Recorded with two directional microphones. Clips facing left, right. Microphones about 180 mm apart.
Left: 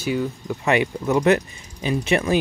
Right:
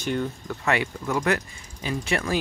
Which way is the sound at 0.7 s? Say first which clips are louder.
Left 5 dB; 20° left (ahead or behind).